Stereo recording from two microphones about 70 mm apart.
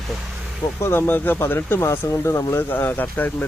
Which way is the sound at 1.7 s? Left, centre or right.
Left.